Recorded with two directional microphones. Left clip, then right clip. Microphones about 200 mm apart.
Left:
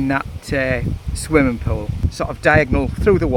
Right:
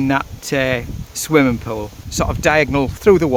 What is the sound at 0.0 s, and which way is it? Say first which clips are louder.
Speech: right 2 dB; 20° right (ahead or behind).